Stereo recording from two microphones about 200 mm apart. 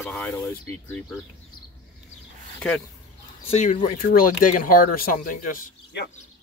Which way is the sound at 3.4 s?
30° left (ahead or behind).